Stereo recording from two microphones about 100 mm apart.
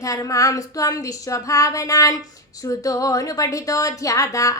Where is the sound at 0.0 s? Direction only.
35° left (ahead or behind).